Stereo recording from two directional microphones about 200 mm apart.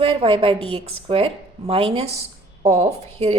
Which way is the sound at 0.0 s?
25° right (ahead or behind).